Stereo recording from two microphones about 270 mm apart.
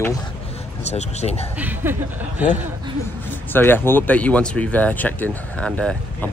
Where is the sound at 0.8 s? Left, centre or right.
Left.